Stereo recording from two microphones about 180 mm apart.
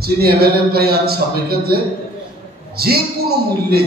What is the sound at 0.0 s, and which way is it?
A man's voice, 60° right (ahead or behind).